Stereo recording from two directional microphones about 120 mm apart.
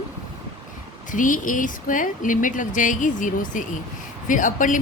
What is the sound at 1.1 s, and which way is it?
Speech, 90° left.